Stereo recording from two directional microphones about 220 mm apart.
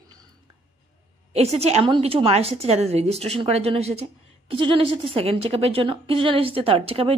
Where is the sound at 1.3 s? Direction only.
30° right (ahead or behind).